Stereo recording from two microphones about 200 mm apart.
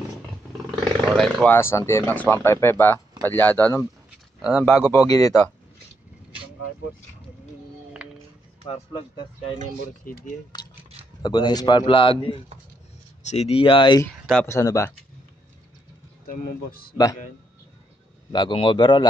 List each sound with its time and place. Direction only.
0.7 s speech: centre (ahead or behind)
4.4 s speech: 5° right (ahead or behind)
5.0 s speech: 15° left (ahead or behind)
8.0 s music: 5° right (ahead or behind)
11.2 s a man's voice: 20° left (ahead or behind)
16.3 s a man's voice: 50° left (ahead or behind)
16.9 s speech: 15° left (ahead or behind)
18.3 s a man's voice: 25° left (ahead or behind)